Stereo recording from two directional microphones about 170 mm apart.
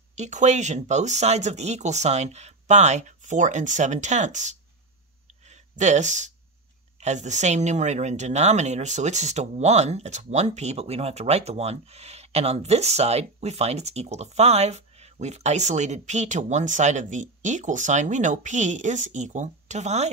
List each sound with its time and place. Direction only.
0.1 s speech: 45° right (ahead or behind)